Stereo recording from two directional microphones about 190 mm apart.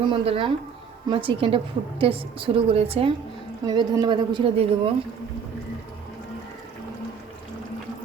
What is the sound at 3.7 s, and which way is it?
A woman's voice, 20° right (ahead or behind).